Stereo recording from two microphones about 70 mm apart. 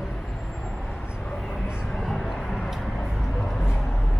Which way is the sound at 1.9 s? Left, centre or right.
Centre.